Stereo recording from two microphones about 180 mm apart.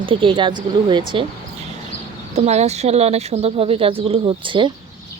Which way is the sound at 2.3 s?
40° right (ahead or behind).